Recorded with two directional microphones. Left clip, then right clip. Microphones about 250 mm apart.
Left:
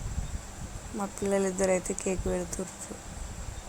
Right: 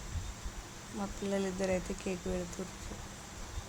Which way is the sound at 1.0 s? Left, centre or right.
Centre.